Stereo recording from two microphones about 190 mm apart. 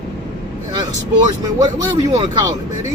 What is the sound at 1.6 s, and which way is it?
Speech, 20° right (ahead or behind).